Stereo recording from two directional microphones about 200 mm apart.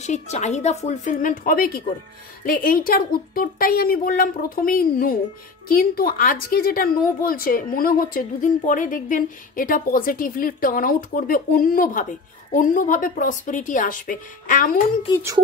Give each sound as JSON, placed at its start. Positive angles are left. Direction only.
{"t": 0.0, "sound": "a woman's voice", "side_deg": 35}
{"t": 15.1, "sound": "speech", "side_deg": 20}